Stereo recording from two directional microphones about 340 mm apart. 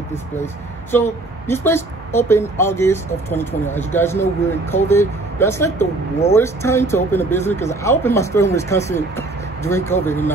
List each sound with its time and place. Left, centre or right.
0.9 s speech: centre